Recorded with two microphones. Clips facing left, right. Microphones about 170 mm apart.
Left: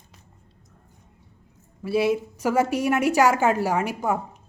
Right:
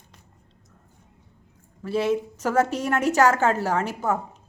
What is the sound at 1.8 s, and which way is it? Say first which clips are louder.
A woman's voice: left 1 dB; 10° left (ahead or behind).